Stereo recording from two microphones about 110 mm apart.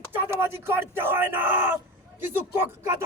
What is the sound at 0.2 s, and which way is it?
A man's voice, 20° right (ahead or behind).